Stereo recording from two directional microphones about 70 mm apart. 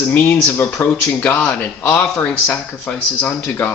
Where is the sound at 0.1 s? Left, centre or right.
Left.